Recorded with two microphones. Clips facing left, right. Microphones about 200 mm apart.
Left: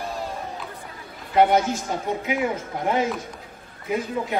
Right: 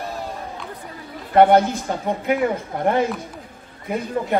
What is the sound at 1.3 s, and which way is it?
A man's voice, 60° right (ahead or behind).